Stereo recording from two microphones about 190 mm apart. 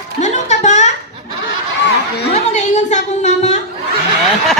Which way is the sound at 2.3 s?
35° left (ahead or behind).